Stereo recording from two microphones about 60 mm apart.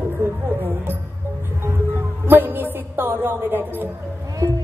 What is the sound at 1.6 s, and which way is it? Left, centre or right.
Music, right.